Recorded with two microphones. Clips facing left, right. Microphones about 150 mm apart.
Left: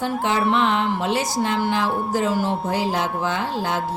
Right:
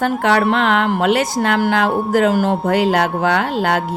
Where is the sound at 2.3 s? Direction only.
50° right (ahead or behind); by 3.8 s 70° right (ahead or behind).